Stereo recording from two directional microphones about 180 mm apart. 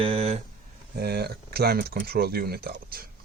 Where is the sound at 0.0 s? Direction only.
35° right (ahead or behind).